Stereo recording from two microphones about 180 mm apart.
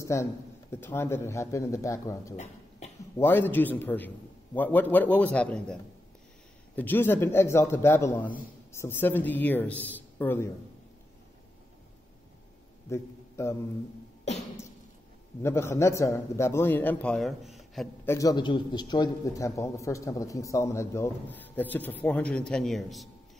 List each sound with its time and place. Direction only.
0.0 s a man's voice: 15° left (ahead or behind)
12.9 s a man's voice: 15° left (ahead or behind)
15.4 s a man's voice: 15° left (ahead or behind); by 17.8 s centre (ahead or behind)
18.0 s a man's voice: 20° left (ahead or behind); by 23.0 s centre (ahead or behind)